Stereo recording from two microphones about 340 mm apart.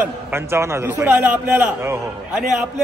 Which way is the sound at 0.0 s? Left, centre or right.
Centre.